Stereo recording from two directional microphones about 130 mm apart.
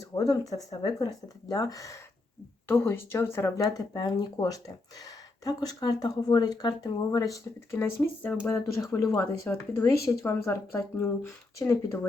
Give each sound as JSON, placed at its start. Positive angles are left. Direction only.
{"t": 0.0, "sound": "speech", "side_deg": 30}